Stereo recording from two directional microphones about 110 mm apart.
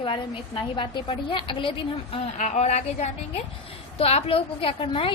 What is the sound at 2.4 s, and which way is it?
Speech, 90° left.